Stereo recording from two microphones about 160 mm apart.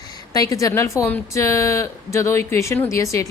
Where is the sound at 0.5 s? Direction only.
20° left (ahead or behind).